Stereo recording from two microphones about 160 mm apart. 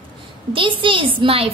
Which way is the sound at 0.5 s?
30° right (ahead or behind).